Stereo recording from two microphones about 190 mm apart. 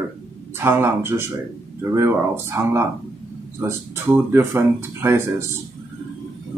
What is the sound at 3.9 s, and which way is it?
Speech, 10° right (ahead or behind).